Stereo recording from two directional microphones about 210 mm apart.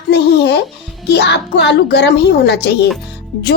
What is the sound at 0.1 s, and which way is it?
Music, 55° left (ahead or behind).